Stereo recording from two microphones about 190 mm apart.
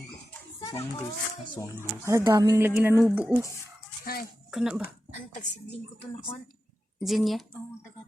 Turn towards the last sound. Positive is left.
turn(degrees=0)  # may be behind; listen again after turning